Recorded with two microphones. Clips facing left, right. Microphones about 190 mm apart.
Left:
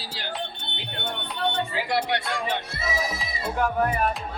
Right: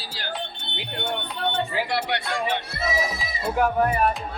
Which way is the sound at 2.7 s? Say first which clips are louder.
Right 3 dB; 5° right (ahead or behind).